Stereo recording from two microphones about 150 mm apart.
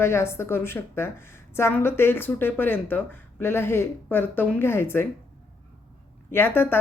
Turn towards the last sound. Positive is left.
turn(degrees=15)  # may be behind; listen again after turning